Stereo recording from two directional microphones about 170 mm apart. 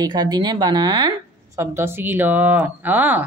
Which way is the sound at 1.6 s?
15° right (ahead or behind).